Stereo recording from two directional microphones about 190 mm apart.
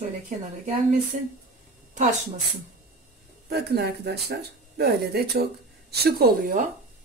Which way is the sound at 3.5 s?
60° right (ahead or behind).